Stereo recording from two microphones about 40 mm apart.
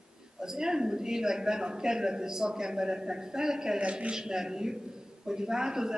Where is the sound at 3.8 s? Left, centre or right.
Right.